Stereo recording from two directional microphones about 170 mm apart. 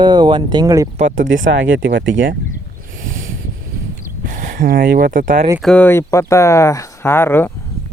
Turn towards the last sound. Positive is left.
turn(degrees=15)  # may be behind; listen again after turning